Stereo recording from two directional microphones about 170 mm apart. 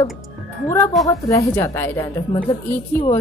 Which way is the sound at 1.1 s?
20° left (ahead or behind).